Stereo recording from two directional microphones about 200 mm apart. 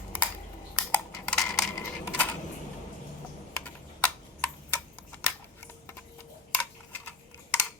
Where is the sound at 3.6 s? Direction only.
5° left (ahead or behind).